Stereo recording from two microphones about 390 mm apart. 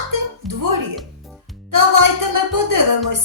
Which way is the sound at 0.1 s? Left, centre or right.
Right.